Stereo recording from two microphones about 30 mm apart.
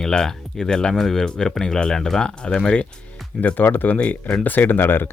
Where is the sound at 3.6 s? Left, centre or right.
Left.